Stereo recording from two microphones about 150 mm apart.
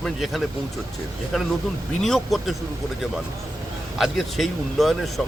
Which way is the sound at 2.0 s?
Centre (ahead or behind).